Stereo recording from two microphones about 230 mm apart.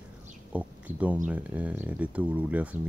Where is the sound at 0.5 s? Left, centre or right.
Centre.